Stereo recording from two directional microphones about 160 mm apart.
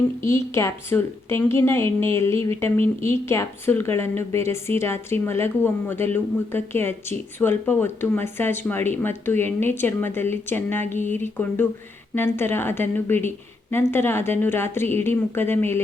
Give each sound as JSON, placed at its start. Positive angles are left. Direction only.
{"t": 0.3, "sound": "speech", "side_deg": 15}